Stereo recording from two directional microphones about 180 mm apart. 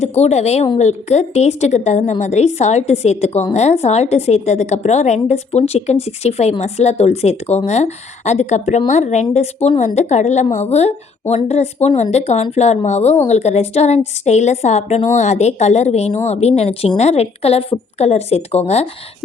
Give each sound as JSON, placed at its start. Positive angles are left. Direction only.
{"t": 0.0, "sound": "a woman's voice", "side_deg": 35}